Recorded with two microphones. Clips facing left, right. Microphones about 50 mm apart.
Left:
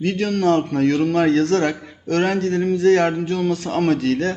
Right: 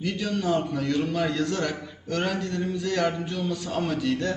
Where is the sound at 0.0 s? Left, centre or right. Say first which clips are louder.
Left 8 dB; left.